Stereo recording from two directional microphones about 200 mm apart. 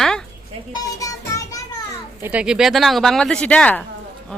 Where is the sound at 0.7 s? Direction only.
15° left (ahead or behind).